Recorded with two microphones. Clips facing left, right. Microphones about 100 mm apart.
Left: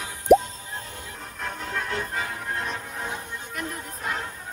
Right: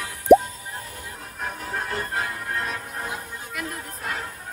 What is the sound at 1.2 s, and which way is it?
Music, 5° right (ahead or behind).